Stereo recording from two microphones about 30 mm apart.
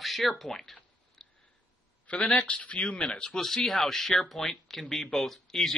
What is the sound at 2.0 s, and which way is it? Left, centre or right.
A man's voice, left.